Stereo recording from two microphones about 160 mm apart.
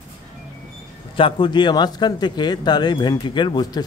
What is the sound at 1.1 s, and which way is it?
A man's voice, 30° left (ahead or behind).